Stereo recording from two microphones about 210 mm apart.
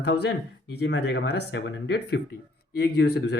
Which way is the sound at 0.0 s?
55° left (ahead or behind).